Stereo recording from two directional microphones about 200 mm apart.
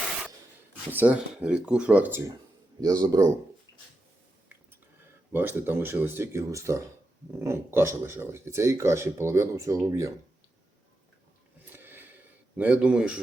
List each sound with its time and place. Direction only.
0.9 s speech: 10° right (ahead or behind)
3.7 s a sound: 15° left (ahead or behind)
5.3 s speech: 10° right (ahead or behind)
11.7 s sniff: 10° right (ahead or behind)
12.5 s speech: 5° right (ahead or behind)